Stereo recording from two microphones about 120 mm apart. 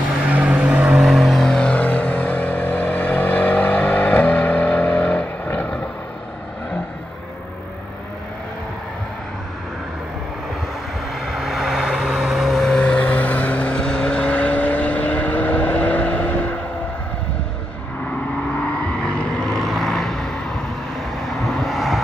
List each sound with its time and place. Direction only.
0.3 s vehicle: 10° right (ahead or behind); by 5.8 s 10° left (ahead or behind)
11.2 s vehicle: centre (ahead or behind)
19.0 s vehicle: 5° left (ahead or behind)